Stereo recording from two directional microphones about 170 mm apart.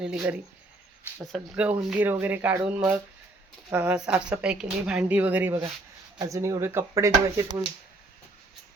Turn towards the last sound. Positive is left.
turn(degrees=-20)  # may be behind; listen again after turning